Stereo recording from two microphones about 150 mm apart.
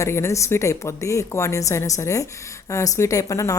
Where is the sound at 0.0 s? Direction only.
20° left (ahead or behind).